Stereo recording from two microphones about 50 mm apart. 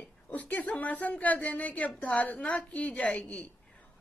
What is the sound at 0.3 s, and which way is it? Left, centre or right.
A woman's voice, left.